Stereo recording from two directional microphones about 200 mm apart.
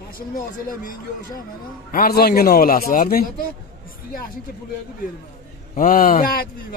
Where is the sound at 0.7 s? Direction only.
45° left (ahead or behind).